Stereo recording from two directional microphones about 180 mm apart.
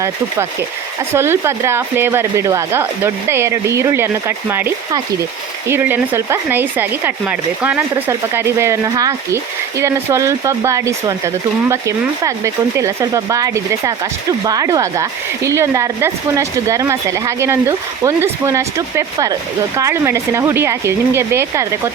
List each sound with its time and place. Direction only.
1.1 s speech: 15° right (ahead or behind)